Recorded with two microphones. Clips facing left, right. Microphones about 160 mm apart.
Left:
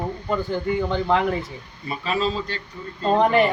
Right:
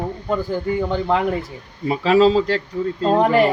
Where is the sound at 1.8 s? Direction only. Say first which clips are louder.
Right 10 dB; 90° right.